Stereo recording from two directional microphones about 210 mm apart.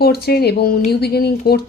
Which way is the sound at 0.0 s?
50° left (ahead or behind).